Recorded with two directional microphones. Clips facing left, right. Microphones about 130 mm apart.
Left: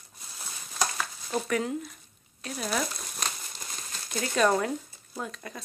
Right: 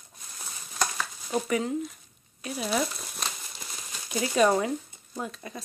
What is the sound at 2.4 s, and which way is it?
Crumpling, 5° right (ahead or behind).